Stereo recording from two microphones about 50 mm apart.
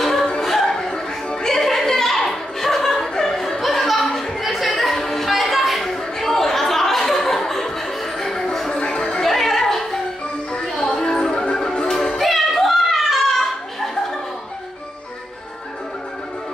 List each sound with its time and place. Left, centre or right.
0.0 s music: centre
4.4 s a sound: centre
8.7 s chatter: centre
9.2 s music: centre
12.2 s children playing: centre